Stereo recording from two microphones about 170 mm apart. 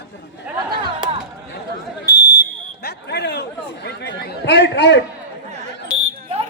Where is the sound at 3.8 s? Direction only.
85° left.